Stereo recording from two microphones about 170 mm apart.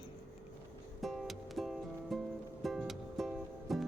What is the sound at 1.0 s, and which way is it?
Music, centre (ahead or behind).